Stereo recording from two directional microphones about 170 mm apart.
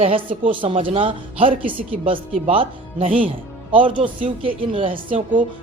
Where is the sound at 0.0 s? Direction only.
35° right (ahead or behind).